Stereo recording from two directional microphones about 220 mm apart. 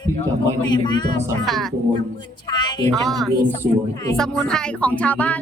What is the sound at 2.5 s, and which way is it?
Speech, 20° left (ahead or behind).